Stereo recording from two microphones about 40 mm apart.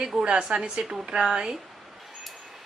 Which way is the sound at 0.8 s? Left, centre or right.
Centre.